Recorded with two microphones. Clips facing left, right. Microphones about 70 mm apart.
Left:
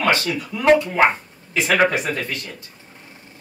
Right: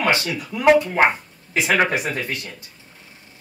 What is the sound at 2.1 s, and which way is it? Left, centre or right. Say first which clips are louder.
Speech: even; centre.